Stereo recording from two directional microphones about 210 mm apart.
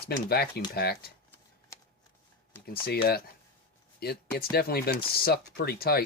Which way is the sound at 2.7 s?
45° left (ahead or behind).